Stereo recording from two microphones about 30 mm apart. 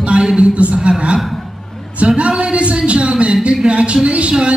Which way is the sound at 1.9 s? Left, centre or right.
Right.